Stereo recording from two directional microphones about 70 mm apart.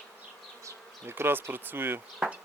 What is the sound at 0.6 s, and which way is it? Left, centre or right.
Bee, right.